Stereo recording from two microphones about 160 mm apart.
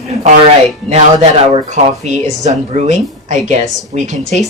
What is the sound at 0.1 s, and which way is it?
A woman's voice, 40° right (ahead or behind).